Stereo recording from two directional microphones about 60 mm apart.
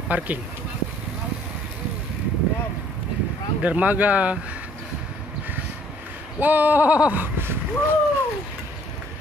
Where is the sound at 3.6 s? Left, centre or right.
Right.